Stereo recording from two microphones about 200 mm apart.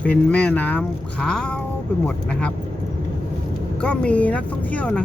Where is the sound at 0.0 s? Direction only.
5° left (ahead or behind).